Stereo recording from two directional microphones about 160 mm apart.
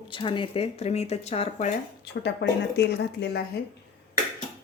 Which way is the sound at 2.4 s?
90° left.